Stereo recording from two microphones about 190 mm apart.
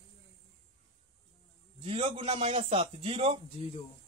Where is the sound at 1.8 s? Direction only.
30° right (ahead or behind).